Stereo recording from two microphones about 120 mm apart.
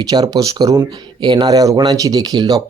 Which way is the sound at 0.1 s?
35° right (ahead or behind).